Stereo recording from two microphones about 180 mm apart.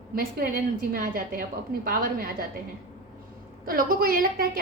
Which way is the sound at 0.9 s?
60° right (ahead or behind).